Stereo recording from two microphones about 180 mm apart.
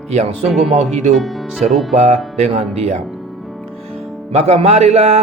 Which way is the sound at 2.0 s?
35° right (ahead or behind).